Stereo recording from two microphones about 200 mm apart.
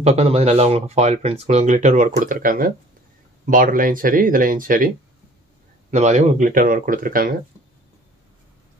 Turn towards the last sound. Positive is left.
turn(degrees=-45)  # may be behind; listen again after turning